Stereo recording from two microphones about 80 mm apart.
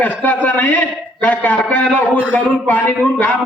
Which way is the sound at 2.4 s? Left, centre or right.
Centre.